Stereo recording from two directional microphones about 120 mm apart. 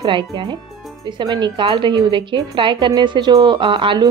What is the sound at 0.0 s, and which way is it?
A woman's voice, 40° right (ahead or behind).